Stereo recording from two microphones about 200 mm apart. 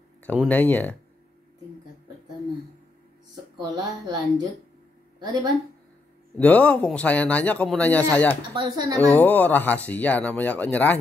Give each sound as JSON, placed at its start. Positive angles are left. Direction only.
{"t": 0.2, "sound": "a man's voice", "side_deg": 10}
{"t": 3.6, "sound": "a woman's voice", "side_deg": -20}
{"t": 5.2, "sound": "a woman's voice", "side_deg": -20}
{"t": 6.3, "sound": "a man's voice", "side_deg": 5}
{"t": 8.5, "sound": "a woman's voice", "side_deg": -20}
{"t": 9.1, "sound": "a man's voice", "side_deg": 10}